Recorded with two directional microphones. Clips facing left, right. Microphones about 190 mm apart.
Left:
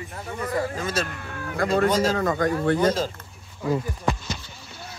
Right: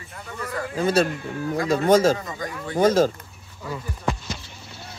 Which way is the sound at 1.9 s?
50° right (ahead or behind).